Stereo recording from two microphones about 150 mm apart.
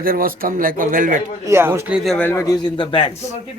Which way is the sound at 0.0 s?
75° right (ahead or behind).